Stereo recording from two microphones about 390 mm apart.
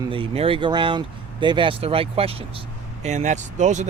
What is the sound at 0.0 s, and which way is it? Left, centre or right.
Speech, centre.